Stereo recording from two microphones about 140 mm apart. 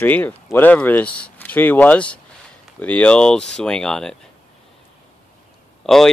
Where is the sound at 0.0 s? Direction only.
15° left (ahead or behind).